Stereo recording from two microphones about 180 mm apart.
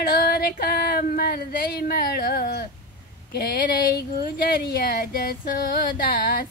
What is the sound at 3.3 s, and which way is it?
Female singing, 50° left (ahead or behind).